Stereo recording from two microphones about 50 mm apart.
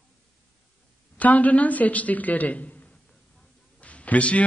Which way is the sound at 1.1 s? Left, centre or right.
Left.